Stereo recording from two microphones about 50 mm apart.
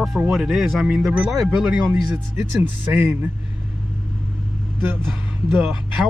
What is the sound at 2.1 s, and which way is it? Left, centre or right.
Speech, right.